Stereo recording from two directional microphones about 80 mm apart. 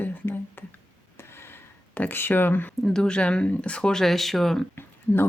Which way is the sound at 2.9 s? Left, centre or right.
Centre.